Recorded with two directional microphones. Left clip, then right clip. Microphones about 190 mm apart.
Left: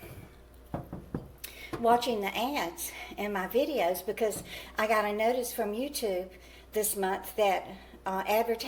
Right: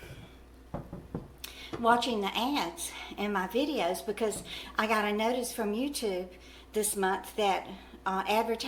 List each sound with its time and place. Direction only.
1.4 s speech: 5° right (ahead or behind)